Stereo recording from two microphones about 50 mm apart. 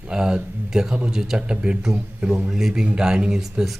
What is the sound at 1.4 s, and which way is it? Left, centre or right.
A man's voice, centre.